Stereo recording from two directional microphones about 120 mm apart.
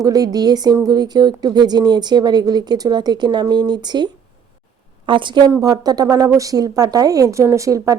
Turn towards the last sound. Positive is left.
turn(degrees=-25)  # may be behind; listen again after turning